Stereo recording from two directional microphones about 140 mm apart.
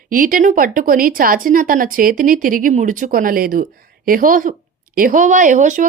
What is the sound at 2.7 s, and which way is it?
A woman's voice, 65° right (ahead or behind).